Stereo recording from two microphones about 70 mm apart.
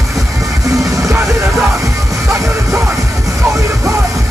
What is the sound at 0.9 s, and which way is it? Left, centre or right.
Music, right.